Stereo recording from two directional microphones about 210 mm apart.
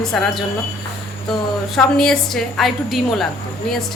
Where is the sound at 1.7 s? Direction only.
5° left (ahead or behind).